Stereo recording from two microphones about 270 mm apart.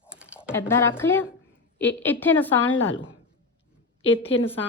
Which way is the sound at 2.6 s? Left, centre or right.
Left.